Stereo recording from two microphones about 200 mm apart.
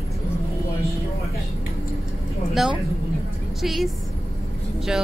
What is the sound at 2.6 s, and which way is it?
A woman's voice, centre (ahead or behind).